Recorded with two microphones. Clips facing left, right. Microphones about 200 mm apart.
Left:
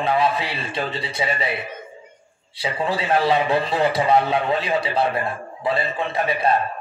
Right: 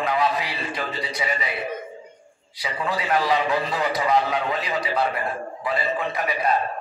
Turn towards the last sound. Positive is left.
turn(degrees=30)  # may be behind; listen again after turning